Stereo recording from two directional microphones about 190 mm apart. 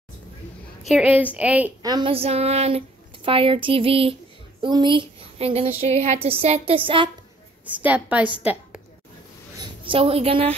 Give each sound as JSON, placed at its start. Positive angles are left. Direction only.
{"t": 0.8, "sound": "a woman's voice", "side_deg": -5}
{"t": 1.8, "sound": "speech", "side_deg": -20}
{"t": 7.6, "sound": "a woman's voice", "side_deg": -10}
{"t": 9.6, "sound": "a woman's voice", "side_deg": -30}